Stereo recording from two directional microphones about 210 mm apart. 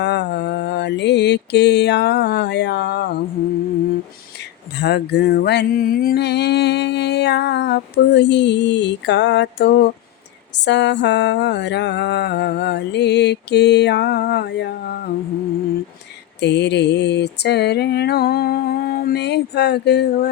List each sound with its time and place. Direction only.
0.0 s music: 55° left (ahead or behind)
4.8 s music: 50° left (ahead or behind)
10.5 s mantra: 55° left (ahead or behind)
16.4 s music: 55° left (ahead or behind)